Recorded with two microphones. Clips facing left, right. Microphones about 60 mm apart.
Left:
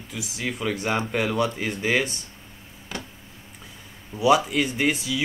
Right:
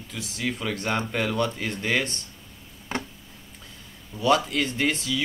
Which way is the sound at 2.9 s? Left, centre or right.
Right.